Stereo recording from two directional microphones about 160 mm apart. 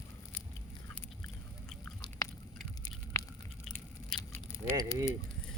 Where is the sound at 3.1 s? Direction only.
15° left (ahead or behind).